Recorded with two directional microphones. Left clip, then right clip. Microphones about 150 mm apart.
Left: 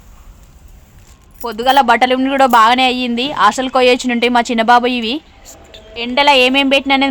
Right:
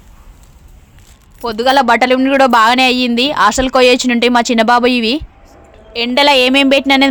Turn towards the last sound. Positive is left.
turn(degrees=-30)  # may be behind; listen again after turning